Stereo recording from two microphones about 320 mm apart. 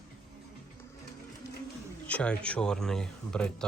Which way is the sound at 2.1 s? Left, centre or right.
Centre.